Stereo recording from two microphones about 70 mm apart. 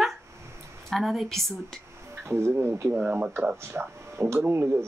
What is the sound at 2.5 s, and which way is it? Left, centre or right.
Speech, right.